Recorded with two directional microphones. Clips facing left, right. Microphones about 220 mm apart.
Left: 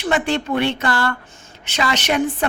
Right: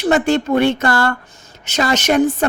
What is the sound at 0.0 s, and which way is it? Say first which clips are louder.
A woman's voice: right 5 dB; 45° right (ahead or behind).